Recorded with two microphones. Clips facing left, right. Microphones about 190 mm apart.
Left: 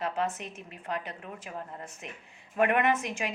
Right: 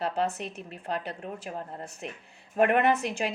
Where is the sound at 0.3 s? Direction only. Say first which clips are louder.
Right 4 dB; 35° right (ahead or behind).